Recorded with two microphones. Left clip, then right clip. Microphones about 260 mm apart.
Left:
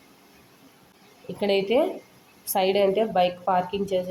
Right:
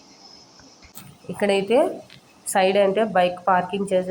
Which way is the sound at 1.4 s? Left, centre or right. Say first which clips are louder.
Right 3 dB; centre.